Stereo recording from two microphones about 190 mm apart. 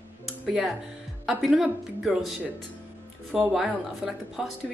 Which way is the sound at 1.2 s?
Centre (ahead or behind).